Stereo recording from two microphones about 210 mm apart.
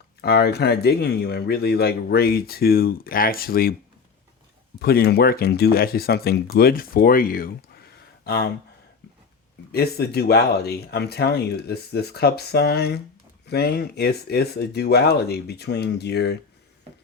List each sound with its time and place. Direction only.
0.2 s speech: 50° left (ahead or behind)
4.8 s speech: 45° left (ahead or behind)
9.7 s speech: 50° left (ahead or behind)